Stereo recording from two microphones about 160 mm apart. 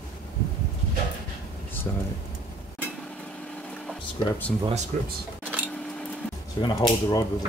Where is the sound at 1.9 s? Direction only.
20° left (ahead or behind).